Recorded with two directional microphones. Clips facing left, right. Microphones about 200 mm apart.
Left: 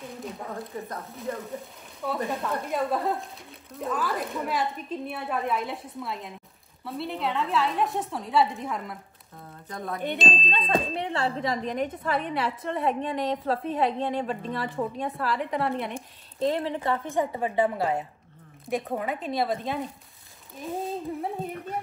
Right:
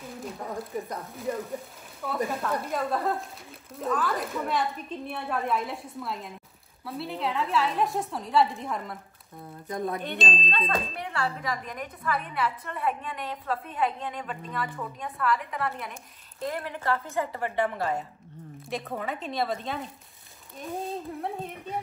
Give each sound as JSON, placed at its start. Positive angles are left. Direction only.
{"t": 1.3, "sound": "speech", "side_deg": -15}
{"t": 2.0, "sound": "a woman's voice", "side_deg": 0}
{"t": 9.7, "sound": "speech", "side_deg": -20}
{"t": 10.1, "sound": "a woman's voice", "side_deg": 0}
{"t": 10.7, "sound": "a woman's voice", "side_deg": 25}
{"t": 21.2, "sound": "a woman's voice", "side_deg": 0}